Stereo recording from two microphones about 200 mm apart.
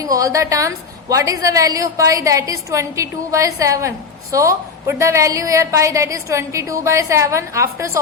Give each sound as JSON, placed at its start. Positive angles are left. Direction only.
{"t": 0.0, "sound": "a woman's voice", "side_deg": -15}